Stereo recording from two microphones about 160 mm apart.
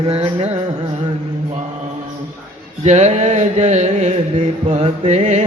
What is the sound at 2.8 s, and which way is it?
Music, 45° right (ahead or behind).